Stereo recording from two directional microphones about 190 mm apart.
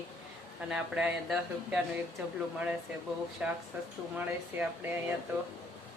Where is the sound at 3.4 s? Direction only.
5° right (ahead or behind).